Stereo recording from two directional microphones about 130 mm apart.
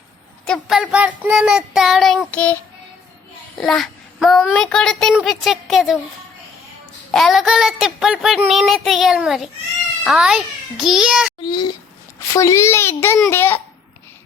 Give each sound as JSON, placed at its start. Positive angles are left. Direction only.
{"t": 0.4, "sound": "a woman's voice", "side_deg": 5}
{"t": 0.8, "sound": "child singing", "side_deg": -5}
{"t": 3.6, "sound": "child singing", "side_deg": 0}
{"t": 7.1, "sound": "child singing", "side_deg": 0}
{"t": 11.4, "sound": "a child's voice", "side_deg": 30}